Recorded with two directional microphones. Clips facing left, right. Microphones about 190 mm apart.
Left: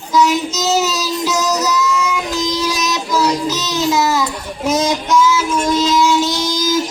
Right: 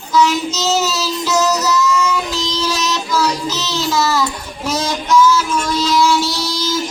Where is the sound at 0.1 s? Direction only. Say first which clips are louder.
Even; 15° left (ahead or behind).